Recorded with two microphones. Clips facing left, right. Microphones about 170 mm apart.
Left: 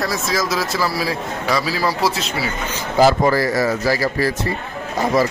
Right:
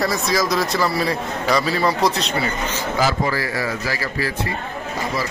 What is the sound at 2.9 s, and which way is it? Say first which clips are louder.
Speech: left 8 dB; 40° left (ahead or behind).